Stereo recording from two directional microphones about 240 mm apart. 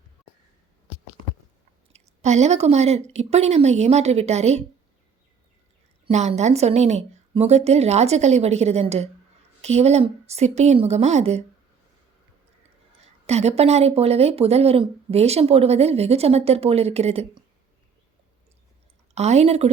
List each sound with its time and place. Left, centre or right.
1.9 s speech: right
6.1 s speech: right
13.2 s speech: right
19.1 s speech: right